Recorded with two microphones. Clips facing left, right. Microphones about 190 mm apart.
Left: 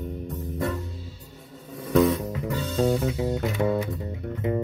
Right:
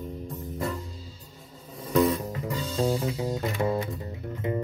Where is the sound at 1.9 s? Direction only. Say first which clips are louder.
Left 3 dB; 65° left (ahead or behind).